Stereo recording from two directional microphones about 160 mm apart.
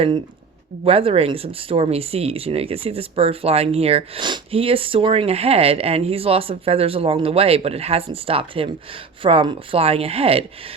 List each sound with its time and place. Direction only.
0.9 s speech: 35° right (ahead or behind)